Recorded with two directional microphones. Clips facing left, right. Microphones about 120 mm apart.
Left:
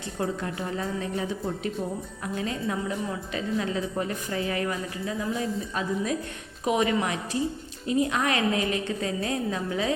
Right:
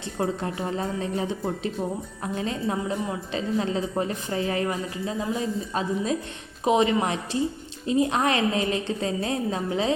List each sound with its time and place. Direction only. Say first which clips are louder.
0.2 s a woman's voice: right 3 dB; 30° right (ahead or behind)